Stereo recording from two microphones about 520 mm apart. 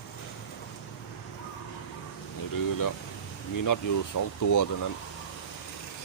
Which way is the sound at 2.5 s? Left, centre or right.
Left.